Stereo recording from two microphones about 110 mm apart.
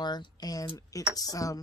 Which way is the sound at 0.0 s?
40° left (ahead or behind).